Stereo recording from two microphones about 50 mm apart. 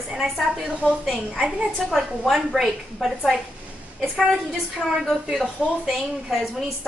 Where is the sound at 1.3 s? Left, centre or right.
Centre.